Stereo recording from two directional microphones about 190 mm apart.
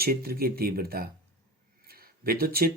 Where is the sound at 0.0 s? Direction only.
55° right (ahead or behind).